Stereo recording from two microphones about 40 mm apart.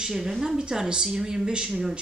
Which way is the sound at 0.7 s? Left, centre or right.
Right.